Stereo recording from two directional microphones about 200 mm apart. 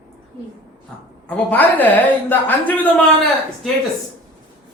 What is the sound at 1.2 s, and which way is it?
Speech, 10° left (ahead or behind).